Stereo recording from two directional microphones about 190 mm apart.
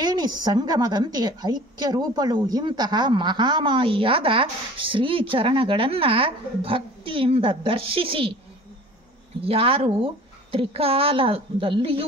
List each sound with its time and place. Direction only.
0.0 s a woman's voice: 20° right (ahead or behind)
9.4 s a woman's voice: 30° right (ahead or behind)